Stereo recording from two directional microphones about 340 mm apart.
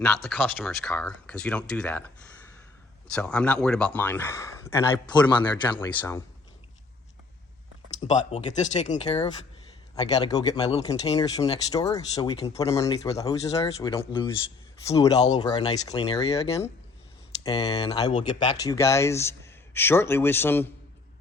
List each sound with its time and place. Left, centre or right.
0.0 s speech: centre
3.1 s speech: centre
7.9 s speech: centre